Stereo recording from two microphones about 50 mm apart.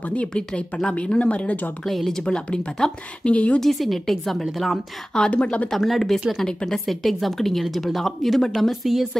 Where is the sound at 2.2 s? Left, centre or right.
Centre.